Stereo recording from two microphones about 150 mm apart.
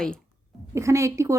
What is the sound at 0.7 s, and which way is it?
Speech, 20° right (ahead or behind).